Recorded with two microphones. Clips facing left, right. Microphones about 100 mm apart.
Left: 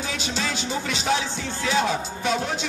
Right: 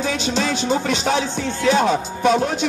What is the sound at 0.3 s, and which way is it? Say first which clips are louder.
Music: right 8 dB; 55° right (ahead or behind).